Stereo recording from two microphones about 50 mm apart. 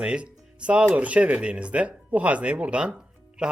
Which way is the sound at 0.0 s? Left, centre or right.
Right.